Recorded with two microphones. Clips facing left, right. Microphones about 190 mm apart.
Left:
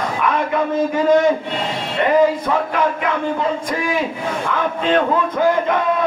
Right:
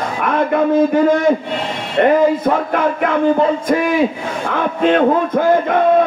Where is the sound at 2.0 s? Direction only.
55° right (ahead or behind).